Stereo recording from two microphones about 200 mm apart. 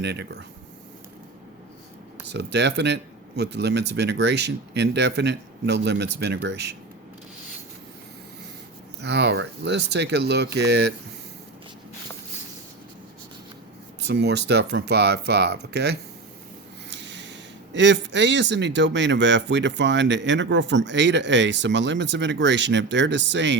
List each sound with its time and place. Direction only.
0.0 s speech: 60° right (ahead or behind)
2.2 s speech: 60° right (ahead or behind)
9.0 s speech: 55° right (ahead or behind)
14.0 s speech: 60° right (ahead or behind)
16.9 s snort: 60° right (ahead or behind)
17.7 s speech: 65° right (ahead or behind)